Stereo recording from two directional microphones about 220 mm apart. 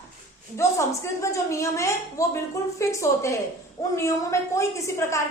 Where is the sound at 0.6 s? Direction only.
10° left (ahead or behind).